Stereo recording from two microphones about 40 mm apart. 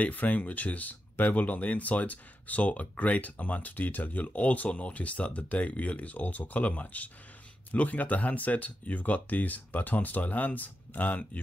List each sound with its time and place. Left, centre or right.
0.0 s speech: left